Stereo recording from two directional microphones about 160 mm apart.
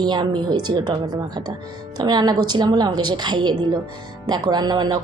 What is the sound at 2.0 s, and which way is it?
Speech, 25° right (ahead or behind).